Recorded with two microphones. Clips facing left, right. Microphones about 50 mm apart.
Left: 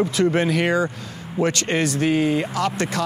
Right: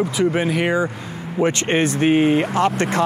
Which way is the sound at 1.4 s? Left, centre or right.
Right.